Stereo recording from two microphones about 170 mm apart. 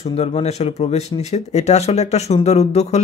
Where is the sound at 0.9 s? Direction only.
40° left (ahead or behind).